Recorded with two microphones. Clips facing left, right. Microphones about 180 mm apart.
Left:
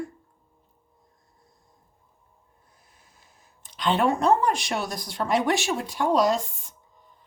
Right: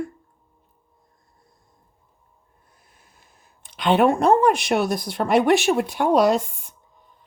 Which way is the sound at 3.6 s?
60° right (ahead or behind).